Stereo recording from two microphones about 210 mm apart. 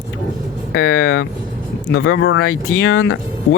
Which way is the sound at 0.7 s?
80° left.